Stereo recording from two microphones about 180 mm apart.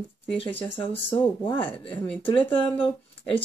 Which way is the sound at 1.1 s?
30° left (ahead or behind).